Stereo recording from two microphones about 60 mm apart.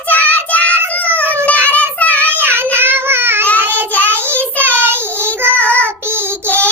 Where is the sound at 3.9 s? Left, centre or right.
Left.